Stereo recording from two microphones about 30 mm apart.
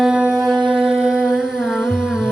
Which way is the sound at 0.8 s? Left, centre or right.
Right.